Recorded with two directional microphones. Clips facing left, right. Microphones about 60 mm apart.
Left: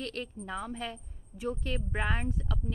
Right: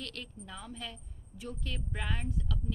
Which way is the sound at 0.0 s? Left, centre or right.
Left.